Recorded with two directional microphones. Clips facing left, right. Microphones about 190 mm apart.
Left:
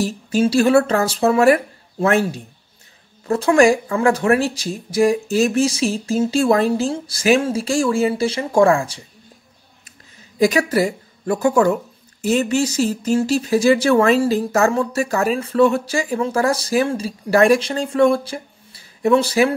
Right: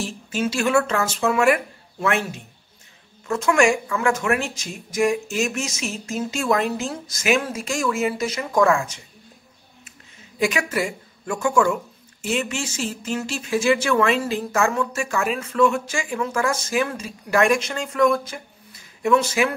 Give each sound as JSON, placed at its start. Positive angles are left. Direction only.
{"t": 0.0, "sound": "speech", "side_deg": 35}
{"t": 10.4, "sound": "speech", "side_deg": 35}